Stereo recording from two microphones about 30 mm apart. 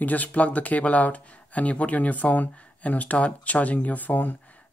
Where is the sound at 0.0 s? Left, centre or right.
Left.